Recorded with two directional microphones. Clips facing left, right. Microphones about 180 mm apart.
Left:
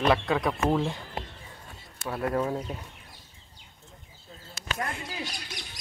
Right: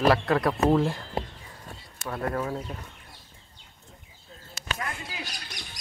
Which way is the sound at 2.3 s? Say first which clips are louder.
Left 2 dB; 15° left (ahead or behind).